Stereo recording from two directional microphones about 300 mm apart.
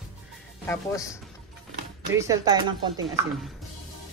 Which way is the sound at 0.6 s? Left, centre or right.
Centre.